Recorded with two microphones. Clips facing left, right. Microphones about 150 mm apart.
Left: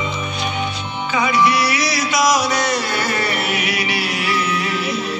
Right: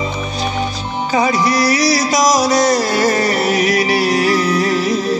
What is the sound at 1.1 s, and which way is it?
Music, 40° right (ahead or behind).